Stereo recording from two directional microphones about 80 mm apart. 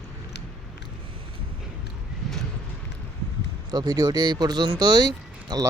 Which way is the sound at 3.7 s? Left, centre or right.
Right.